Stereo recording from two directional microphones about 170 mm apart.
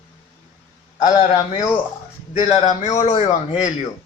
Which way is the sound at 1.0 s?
25° left (ahead or behind).